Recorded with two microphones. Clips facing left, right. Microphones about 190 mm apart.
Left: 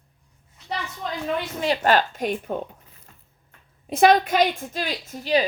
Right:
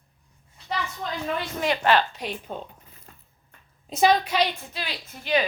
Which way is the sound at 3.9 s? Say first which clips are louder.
Left 4 dB; 55° left (ahead or behind).